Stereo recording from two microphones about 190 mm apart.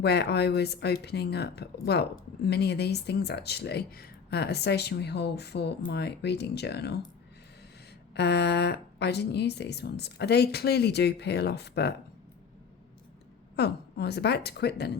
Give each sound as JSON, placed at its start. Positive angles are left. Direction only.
{"t": 0.0, "sound": "speech", "side_deg": 60}
{"t": 8.1, "sound": "speech", "side_deg": 60}
{"t": 13.6, "sound": "speech", "side_deg": 60}